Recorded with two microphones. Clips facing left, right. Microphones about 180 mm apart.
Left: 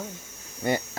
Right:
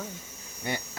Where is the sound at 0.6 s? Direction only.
50° left (ahead or behind).